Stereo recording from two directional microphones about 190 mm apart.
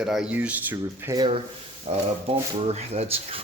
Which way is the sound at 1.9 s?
35° right (ahead or behind).